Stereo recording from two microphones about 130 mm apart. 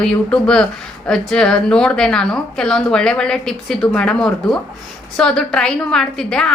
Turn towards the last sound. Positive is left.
turn(degrees=5)  # may be behind; listen again after turning